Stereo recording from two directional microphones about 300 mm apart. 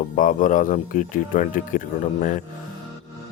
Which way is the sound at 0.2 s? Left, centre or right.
Left.